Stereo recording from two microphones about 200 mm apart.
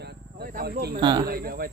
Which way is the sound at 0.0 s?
50° right (ahead or behind).